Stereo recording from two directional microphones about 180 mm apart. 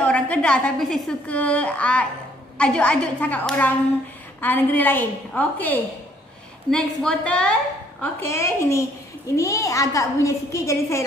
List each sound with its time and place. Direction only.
0.0 s a woman's voice: 5° left (ahead or behind)